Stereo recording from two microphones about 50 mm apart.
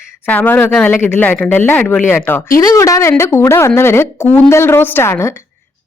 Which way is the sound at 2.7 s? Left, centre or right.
Left.